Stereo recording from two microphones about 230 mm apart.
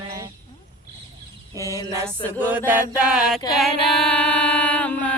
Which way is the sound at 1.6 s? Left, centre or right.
Centre.